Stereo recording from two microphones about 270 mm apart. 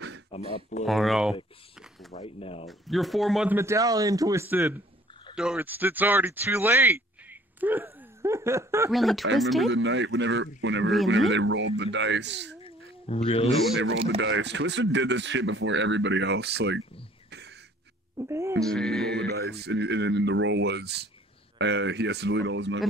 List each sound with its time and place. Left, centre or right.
0.3 s a sound: left
0.8 s speech: centre
1.8 s a sound: centre
2.1 s speech: left
2.7 s a man's voice: centre
8.9 s speech: centre
9.7 s speech: right
12.6 s duck: left
14.0 s speech: right
17.3 s a sound: right
18.1 s speech: centre
18.6 s speech: centre
19.1 s speech: right